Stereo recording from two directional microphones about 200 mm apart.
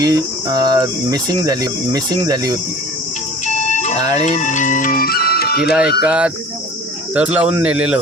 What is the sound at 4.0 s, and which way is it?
Speech, 20° right (ahead or behind).